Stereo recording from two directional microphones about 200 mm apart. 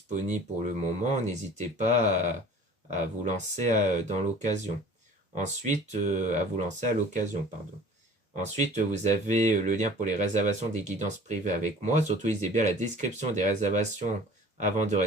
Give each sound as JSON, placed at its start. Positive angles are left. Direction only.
{"t": 1.0, "sound": "speech", "side_deg": -35}
{"t": 8.4, "sound": "speech", "side_deg": -35}